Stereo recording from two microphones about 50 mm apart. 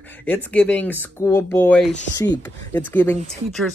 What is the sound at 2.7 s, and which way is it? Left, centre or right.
Speech, left.